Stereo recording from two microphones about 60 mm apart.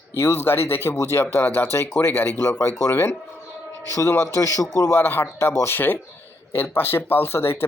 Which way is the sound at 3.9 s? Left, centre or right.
Left.